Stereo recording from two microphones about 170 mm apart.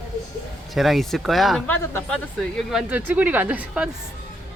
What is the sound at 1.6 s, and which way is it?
Speech, 15° left (ahead or behind).